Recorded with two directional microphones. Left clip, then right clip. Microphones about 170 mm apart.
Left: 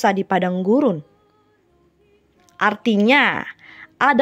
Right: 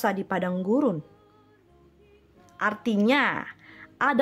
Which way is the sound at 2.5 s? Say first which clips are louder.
Left 8 dB; 30° left (ahead or behind).